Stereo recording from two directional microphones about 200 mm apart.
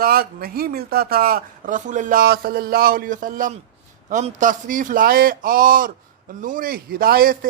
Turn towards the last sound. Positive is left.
turn(degrees=-45)  # may be behind; listen again after turning